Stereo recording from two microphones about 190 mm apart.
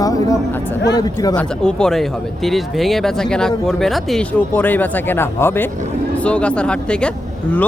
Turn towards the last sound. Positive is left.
turn(degrees=5)  # may be behind; listen again after turning